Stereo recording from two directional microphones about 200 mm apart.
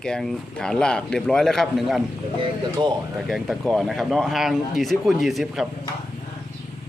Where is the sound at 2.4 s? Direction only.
25° right (ahead or behind).